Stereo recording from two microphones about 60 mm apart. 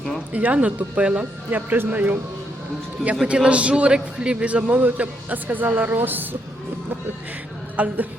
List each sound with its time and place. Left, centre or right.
0.3 s a man's voice: right
3.2 s a man's voice: centre; by 6.2 s right
7.8 s a man's voice: right